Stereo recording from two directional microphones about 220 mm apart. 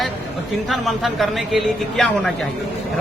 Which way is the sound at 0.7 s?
Centre (ahead or behind).